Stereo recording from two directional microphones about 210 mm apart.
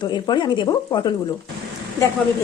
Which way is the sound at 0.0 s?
20° left (ahead or behind).